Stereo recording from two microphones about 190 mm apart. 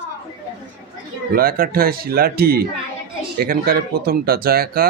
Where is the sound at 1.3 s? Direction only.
50° right (ahead or behind).